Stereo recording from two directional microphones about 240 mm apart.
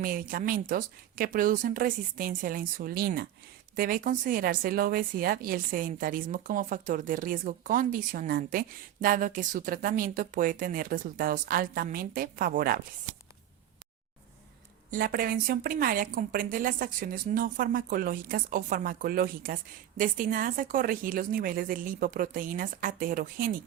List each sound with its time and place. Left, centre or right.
0.0 s a woman's voice: right
14.8 s a woman's voice: right